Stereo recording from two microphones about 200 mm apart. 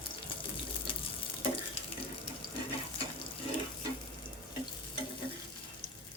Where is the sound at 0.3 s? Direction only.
25° left (ahead or behind).